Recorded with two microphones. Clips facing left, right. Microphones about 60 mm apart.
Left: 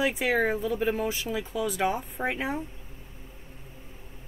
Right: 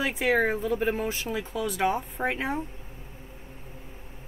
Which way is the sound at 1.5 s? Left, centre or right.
Centre.